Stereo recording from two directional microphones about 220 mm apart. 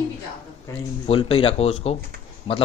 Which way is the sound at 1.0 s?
25° left (ahead or behind).